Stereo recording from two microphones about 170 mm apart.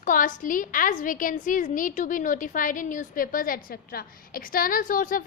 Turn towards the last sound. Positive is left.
turn(degrees=55)  # may be behind; listen again after turning